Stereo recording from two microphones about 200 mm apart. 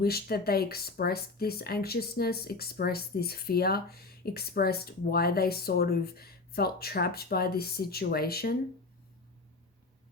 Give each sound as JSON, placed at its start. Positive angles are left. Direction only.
{"t": 0.0, "sound": "speech", "side_deg": 50}